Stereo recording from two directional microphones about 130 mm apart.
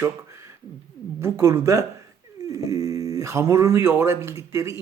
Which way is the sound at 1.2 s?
20° right (ahead or behind).